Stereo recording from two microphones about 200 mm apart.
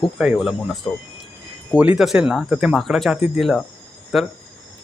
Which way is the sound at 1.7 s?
5° right (ahead or behind).